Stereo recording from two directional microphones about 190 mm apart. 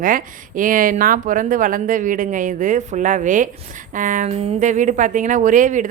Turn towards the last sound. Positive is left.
turn(degrees=-40)  # may be behind; listen again after turning